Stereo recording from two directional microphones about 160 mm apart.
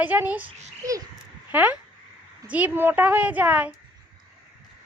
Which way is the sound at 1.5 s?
10° right (ahead or behind).